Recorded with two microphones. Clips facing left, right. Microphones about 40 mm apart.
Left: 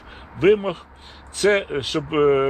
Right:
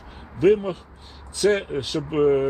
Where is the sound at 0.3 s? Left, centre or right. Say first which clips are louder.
Left 1 dB; left.